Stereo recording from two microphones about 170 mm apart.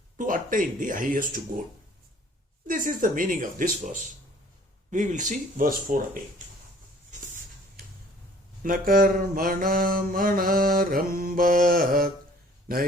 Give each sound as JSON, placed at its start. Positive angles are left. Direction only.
{"t": 0.2, "sound": "speech", "side_deg": -50}
{"t": 2.6, "sound": "speech", "side_deg": -50}
{"t": 8.6, "sound": "mantra", "side_deg": -55}